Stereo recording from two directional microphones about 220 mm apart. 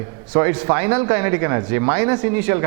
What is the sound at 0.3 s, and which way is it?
Speech, 15° right (ahead or behind).